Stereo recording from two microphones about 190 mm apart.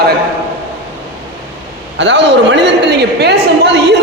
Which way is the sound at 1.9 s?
70° right (ahead or behind).